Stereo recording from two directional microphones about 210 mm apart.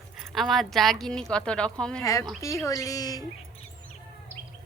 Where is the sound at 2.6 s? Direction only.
15° left (ahead or behind).